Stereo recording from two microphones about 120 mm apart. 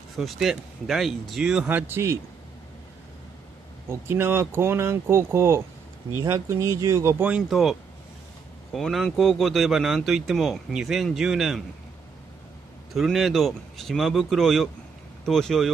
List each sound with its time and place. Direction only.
0.1 s speech: centre (ahead or behind); by 2.1 s 20° right (ahead or behind)
3.9 s speech: 20° right (ahead or behind)
7.4 s speech: centre (ahead or behind)
8.7 s speech: 5° left (ahead or behind)
12.9 s speech: centre (ahead or behind)